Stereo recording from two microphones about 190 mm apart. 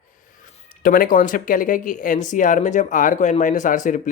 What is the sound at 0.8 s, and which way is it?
Speech, 45° left (ahead or behind).